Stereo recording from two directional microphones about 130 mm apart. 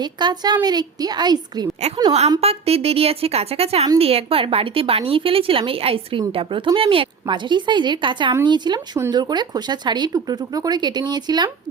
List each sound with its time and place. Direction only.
0.0 s speech: 35° right (ahead or behind)
2.4 s a woman's voice: 50° right (ahead or behind); by 11.5 s 35° right (ahead or behind)